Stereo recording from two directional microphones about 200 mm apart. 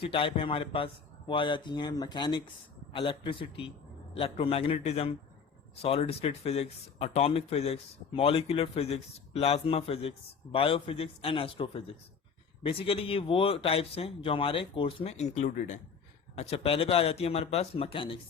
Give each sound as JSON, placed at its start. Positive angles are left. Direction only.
{"t": 0.0, "sound": "speech", "side_deg": 25}